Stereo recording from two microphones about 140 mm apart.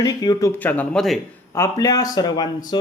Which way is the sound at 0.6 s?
10° left (ahead or behind).